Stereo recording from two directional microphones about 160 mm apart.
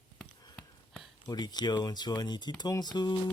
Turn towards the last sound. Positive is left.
turn(degrees=25)  # may be behind; listen again after turning